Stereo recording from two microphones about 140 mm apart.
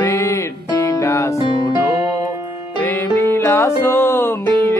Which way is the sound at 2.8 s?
15° left (ahead or behind).